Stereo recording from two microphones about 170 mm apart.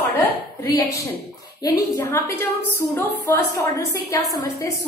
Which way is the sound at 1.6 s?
15° left (ahead or behind).